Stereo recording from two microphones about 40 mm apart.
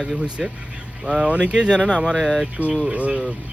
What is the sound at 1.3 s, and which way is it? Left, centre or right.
Speech, right.